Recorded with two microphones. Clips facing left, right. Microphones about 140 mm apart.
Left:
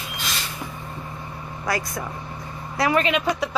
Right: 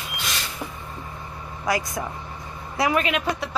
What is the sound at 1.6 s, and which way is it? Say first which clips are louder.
Speech: right 2 dB; 20° right (ahead or behind).